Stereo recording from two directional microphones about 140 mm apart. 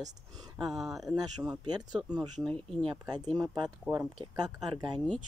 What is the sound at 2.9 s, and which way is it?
Speech, 30° right (ahead or behind).